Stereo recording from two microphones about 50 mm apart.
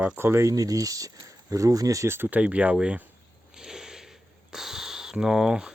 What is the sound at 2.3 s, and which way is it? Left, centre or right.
Speech, right.